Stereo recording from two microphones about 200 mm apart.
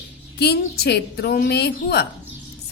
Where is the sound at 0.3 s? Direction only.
55° left (ahead or behind).